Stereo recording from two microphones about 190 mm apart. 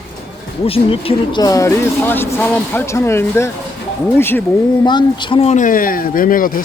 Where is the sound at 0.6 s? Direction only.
30° left (ahead or behind); by 4.9 s 10° left (ahead or behind).